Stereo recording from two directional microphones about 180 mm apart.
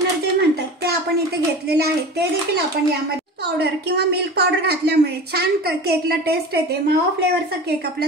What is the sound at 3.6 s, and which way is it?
A woman's voice, 65° right (ahead or behind).